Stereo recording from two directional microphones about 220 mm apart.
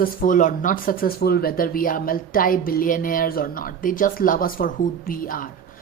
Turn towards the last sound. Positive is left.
turn(degrees=40)  # may be behind; listen again after turning